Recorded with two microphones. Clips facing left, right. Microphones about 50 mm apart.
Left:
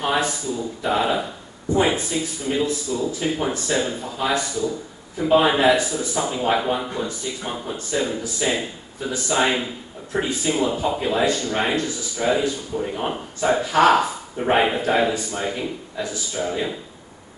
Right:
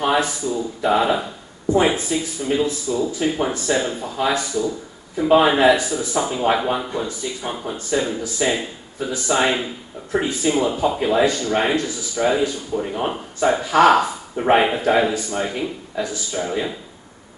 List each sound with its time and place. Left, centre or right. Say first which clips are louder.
0.0 s a sound: right 3 dB; centre
0.8 s speech: right 3 dB; centre
14.3 s speech: right 4 dB; centre
14.6 s speech: right 2 dB; centre